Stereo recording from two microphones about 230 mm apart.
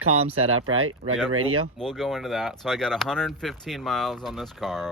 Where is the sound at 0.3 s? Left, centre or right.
Right.